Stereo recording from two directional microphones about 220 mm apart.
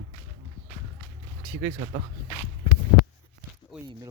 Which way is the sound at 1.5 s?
15° right (ahead or behind).